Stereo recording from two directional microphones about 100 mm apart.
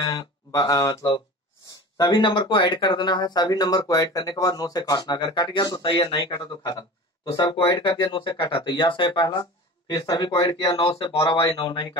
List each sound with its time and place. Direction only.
0.0 s speech: 35° left (ahead or behind)
5.8 s speech: 55° left (ahead or behind)
6.1 s speech: 40° left (ahead or behind)
7.8 s speech: 55° left (ahead or behind)
10.7 s speech: 30° left (ahead or behind)
11.2 s speech: 50° left (ahead or behind)